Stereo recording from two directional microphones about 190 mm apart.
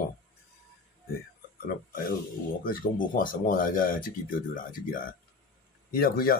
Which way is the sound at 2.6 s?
45° left (ahead or behind).